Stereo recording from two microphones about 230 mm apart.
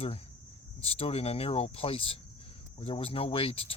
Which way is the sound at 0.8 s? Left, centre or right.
Left.